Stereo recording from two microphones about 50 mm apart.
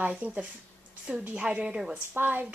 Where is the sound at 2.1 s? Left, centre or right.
Right.